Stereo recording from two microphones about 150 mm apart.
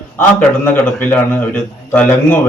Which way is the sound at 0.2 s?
10° left (ahead or behind).